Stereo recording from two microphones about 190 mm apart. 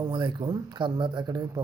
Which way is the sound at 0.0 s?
25° right (ahead or behind).